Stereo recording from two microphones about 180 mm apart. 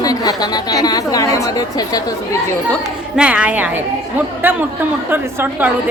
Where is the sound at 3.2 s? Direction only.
5° right (ahead or behind).